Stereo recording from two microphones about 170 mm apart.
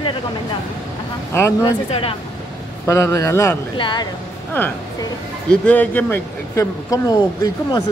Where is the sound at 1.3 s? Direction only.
15° left (ahead or behind).